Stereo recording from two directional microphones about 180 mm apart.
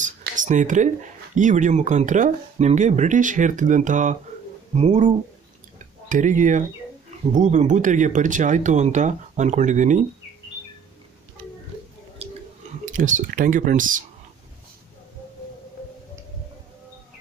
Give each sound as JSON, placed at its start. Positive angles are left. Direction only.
{"t": 0.4, "sound": "speech", "side_deg": -45}
{"t": 6.0, "sound": "speech", "side_deg": -45}
{"t": 12.2, "sound": "a sound", "side_deg": -35}
{"t": 12.8, "sound": "speech", "side_deg": -45}